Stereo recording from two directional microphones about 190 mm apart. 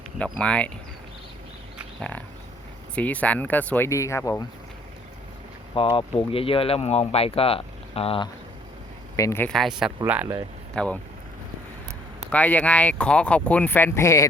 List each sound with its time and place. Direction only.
0.2 s speech: 5° left (ahead or behind)
2.0 s speech: 5° left (ahead or behind)
5.7 s speech: 25° left (ahead or behind)
9.1 s speech: 15° left (ahead or behind); by 10.4 s 10° right (ahead or behind)
10.8 s speech: 5° left (ahead or behind)
12.3 s speech: 5° left (ahead or behind)